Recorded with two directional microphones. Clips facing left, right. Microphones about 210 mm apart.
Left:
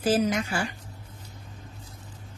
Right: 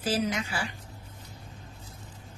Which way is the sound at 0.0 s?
50° left (ahead or behind).